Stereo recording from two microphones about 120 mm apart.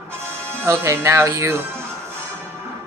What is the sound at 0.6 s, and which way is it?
Speech, 20° right (ahead or behind).